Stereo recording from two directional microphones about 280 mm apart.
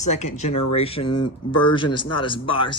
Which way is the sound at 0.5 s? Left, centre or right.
Left.